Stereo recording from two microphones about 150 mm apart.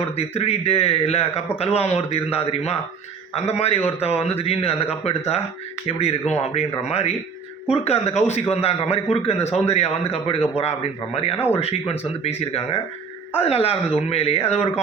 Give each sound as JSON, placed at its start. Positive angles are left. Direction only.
{"t": 0.0, "sound": "a man's voice", "side_deg": 40}
{"t": 11.3, "sound": "speech", "side_deg": 15}
{"t": 11.6, "sound": "a man's voice", "side_deg": 45}